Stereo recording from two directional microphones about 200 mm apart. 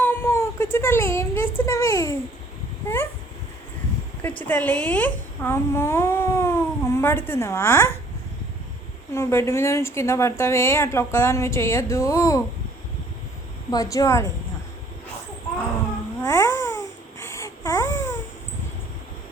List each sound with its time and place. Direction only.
0.0 s a sound: 10° left (ahead or behind)
4.2 s a woman's voice: 10° left (ahead or behind)
9.1 s a woman's voice: 15° left (ahead or behind)
13.7 s a woman's voice: 15° left (ahead or behind)
16.2 s babbling: 15° left (ahead or behind)